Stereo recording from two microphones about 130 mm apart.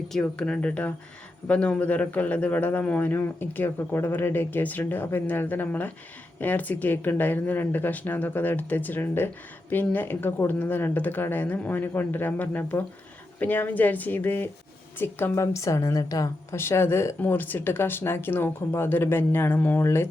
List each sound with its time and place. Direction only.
0.1 s speech: 5° left (ahead or behind)